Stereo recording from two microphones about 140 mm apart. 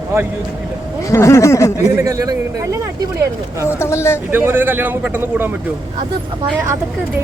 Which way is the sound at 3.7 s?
20° left (ahead or behind).